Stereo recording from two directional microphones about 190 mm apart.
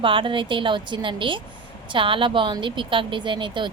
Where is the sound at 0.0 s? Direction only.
25° right (ahead or behind).